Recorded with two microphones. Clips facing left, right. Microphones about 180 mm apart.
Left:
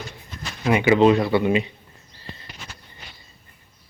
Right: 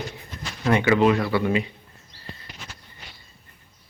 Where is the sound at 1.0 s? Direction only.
25° left (ahead or behind).